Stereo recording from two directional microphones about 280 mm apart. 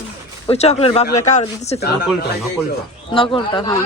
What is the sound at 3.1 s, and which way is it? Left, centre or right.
Speech, centre.